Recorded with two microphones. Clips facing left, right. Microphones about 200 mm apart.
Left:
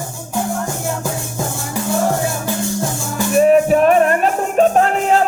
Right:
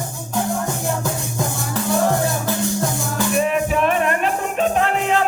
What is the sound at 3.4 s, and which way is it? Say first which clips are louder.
Music: left 8 dB; 40° left (ahead or behind).